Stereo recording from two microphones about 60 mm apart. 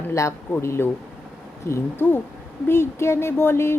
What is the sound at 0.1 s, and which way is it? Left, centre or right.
Speech, left.